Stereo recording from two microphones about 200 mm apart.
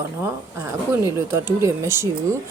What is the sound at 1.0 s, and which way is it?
Speech, 15° right (ahead or behind).